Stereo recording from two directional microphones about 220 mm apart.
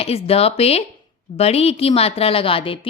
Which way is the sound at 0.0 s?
25° left (ahead or behind).